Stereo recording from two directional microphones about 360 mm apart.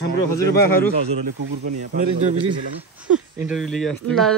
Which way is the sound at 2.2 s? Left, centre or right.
Centre.